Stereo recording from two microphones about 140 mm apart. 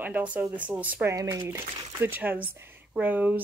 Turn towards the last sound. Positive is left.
turn(degrees=-10)  # may be behind; listen again after turning